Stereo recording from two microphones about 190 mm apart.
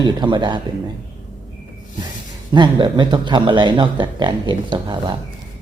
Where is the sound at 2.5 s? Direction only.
25° right (ahead or behind).